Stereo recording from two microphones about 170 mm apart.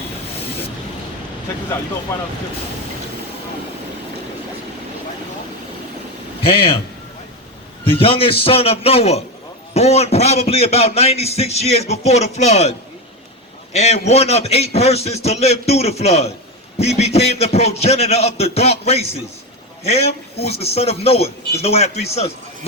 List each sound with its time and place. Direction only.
7.9 s a man's voice: 30° left (ahead or behind)
13.7 s a man's voice: 40° left (ahead or behind)